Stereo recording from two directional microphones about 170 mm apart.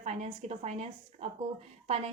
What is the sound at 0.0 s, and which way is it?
A woman's voice, 40° right (ahead or behind).